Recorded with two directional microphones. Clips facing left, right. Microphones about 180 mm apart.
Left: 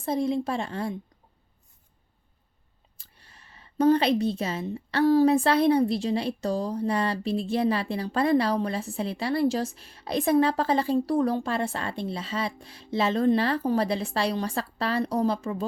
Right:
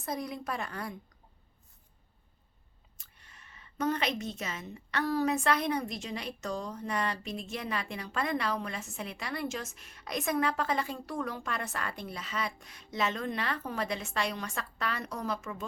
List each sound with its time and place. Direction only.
0.0 s speech: 25° left (ahead or behind)
3.0 s a woman's voice: 30° left (ahead or behind)